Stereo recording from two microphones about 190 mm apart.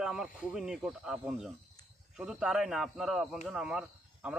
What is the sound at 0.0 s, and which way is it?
Speech, 5° right (ahead or behind).